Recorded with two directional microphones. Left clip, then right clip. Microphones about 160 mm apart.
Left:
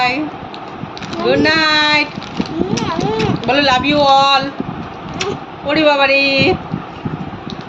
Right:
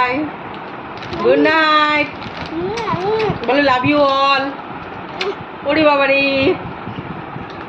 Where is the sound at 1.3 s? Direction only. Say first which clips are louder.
Even; 20° left (ahead or behind).